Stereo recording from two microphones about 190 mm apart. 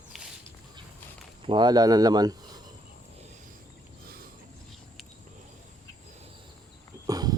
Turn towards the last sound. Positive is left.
turn(degrees=-20)  # may be behind; listen again after turning